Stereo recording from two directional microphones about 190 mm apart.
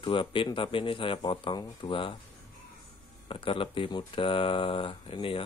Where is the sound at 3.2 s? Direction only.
25° left (ahead or behind).